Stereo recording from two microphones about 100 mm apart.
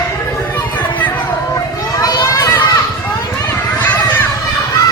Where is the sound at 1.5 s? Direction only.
35° left (ahead or behind).